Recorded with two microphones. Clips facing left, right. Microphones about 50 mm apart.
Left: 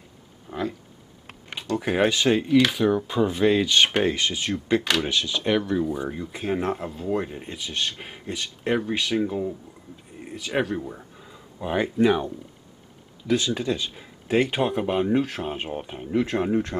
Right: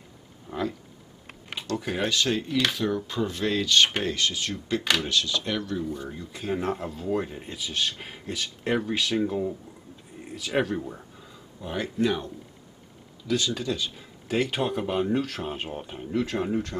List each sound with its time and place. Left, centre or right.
0.5 s speech: centre
1.5 s computer keyboard: centre
1.8 s speech: left
2.4 s speech: centre
6.8 s speech: centre
11.6 s speech: left
13.6 s speech: left